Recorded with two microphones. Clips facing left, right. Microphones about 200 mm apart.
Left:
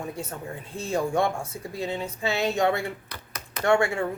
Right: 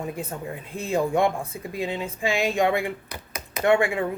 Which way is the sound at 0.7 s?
15° right (ahead or behind).